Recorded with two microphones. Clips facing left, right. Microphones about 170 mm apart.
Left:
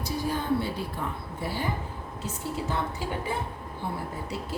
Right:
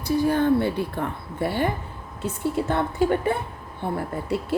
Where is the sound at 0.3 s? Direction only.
60° right (ahead or behind).